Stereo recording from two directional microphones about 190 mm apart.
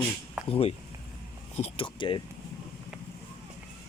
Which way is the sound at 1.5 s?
30° left (ahead or behind).